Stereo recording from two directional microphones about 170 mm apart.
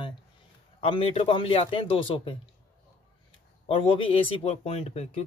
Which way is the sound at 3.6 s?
35° left (ahead or behind).